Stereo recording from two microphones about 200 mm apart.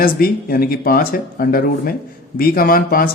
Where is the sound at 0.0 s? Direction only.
45° left (ahead or behind).